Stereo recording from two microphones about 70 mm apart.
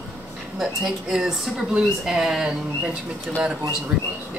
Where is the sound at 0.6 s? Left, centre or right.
Centre.